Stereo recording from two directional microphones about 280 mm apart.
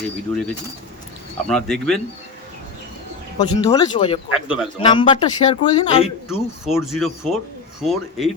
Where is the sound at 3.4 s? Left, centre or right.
Centre.